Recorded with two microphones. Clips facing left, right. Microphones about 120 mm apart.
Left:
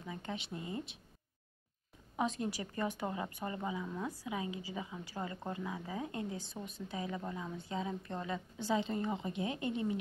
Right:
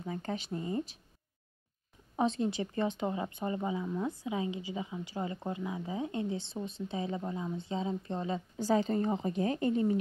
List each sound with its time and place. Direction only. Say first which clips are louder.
0.0 s a woman's voice: right 5 dB; 40° right (ahead or behind)
2.1 s a woman's voice: right 5 dB; 30° right (ahead or behind)
8.5 s a woman's voice: right 6 dB; 40° right (ahead or behind)